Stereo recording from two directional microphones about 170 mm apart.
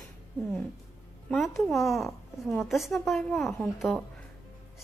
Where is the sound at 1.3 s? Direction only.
Centre (ahead or behind).